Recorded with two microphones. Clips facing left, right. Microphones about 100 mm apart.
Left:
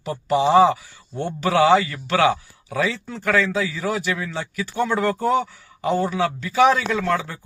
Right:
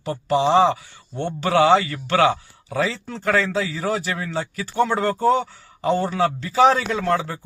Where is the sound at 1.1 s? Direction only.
10° left (ahead or behind).